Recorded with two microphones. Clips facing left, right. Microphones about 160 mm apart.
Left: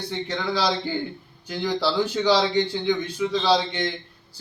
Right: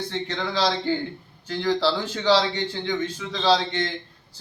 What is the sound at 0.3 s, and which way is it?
A man's voice, 10° left (ahead or behind).